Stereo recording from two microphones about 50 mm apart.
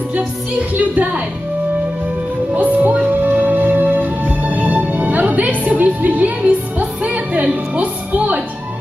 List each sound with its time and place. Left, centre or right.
0.7 s a woman's voice: right
2.6 s speech: right
3.3 s music: right